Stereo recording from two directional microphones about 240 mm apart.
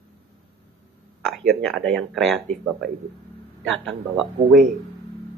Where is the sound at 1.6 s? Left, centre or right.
Centre.